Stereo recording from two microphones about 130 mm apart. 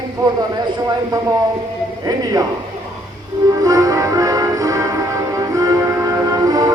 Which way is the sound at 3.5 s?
25° right (ahead or behind).